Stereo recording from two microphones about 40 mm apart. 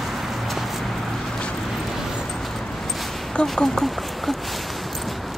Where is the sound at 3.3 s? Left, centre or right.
Centre.